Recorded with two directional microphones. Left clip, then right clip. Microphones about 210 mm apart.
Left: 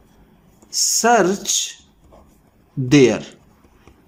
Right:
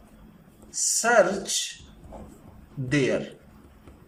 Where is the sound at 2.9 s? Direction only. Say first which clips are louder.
Left 11 dB; 60° left (ahead or behind).